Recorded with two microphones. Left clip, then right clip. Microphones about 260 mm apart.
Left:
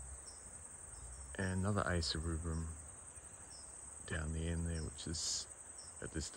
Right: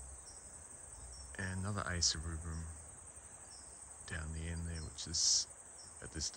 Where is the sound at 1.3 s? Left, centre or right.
Centre.